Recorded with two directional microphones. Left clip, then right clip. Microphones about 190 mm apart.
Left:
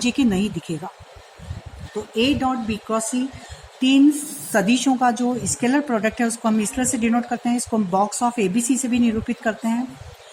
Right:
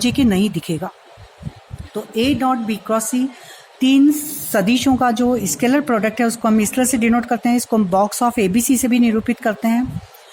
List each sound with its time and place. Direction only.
0.0 s a woman's voice: 45° right (ahead or behind)
2.1 s a woman's voice: 45° right (ahead or behind)